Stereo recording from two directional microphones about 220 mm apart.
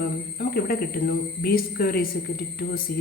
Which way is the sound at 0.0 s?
40° left (ahead or behind).